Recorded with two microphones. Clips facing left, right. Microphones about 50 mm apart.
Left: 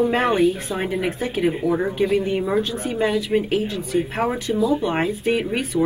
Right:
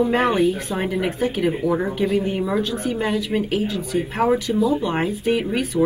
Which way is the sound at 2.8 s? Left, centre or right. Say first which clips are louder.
Left 1 dB; left.